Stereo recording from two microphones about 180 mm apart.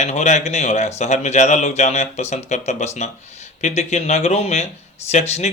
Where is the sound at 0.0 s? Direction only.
40° left (ahead or behind).